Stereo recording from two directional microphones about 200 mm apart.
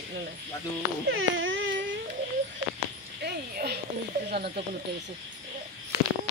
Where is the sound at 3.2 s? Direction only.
55° right (ahead or behind).